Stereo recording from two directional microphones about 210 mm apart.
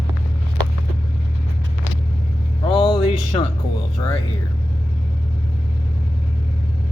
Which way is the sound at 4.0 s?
20° left (ahead or behind).